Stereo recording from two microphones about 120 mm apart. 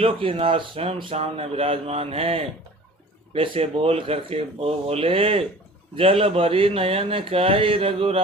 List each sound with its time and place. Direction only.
0.0 s speech: 50° right (ahead or behind)